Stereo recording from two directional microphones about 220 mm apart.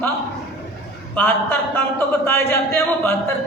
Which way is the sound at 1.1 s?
10° left (ahead or behind).